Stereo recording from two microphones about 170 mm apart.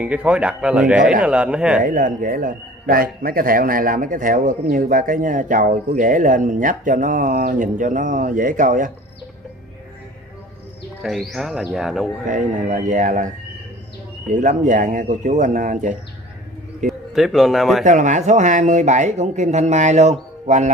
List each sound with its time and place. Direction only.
0.0 s speech: 10° right (ahead or behind)
1.8 s speech: 50° right (ahead or behind)
11.0 s speech: centre (ahead or behind)
12.3 s speech: 50° right (ahead or behind)
14.3 s speech: 45° right (ahead or behind)
17.1 s speech: centre (ahead or behind)
17.8 s speech: 45° right (ahead or behind)